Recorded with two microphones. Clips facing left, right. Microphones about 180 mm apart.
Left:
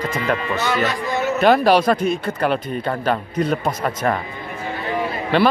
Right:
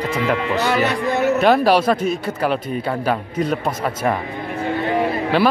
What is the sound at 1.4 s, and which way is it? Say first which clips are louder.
A man's voice: left 2 dB; centre (ahead or behind).